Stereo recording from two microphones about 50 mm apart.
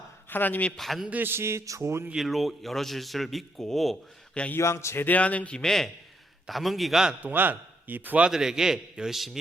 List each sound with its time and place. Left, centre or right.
0.3 s speech: left
0.8 s a man's voice: centre
1.2 s speech: right
2.1 s a man's voice: centre
4.5 s speech: left
5.0 s speech: left
5.5 s a man's voice: centre
7.2 s a man's voice: right
8.3 s a man's voice: centre